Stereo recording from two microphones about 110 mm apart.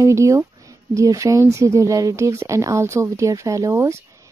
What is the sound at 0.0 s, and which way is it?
Speech, 25° right (ahead or behind).